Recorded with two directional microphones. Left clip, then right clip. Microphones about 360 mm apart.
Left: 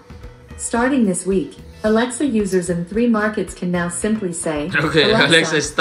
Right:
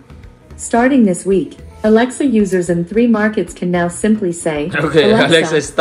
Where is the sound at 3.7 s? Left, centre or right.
Centre.